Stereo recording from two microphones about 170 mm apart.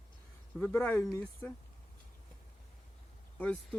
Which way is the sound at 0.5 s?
10° left (ahead or behind).